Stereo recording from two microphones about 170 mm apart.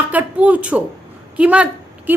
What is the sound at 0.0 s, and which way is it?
Speech, 10° right (ahead or behind).